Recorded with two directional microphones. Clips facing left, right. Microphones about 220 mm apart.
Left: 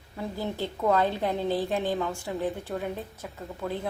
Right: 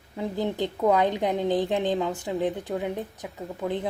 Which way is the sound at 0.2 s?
20° right (ahead or behind).